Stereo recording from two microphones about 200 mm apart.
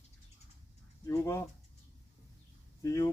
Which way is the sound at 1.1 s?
15° left (ahead or behind).